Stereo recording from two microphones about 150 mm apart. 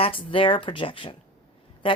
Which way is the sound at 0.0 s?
35° left (ahead or behind).